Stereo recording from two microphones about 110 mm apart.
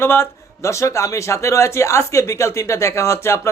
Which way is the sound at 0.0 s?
25° left (ahead or behind).